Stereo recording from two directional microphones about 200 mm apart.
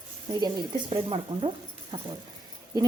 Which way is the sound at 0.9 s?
25° right (ahead or behind).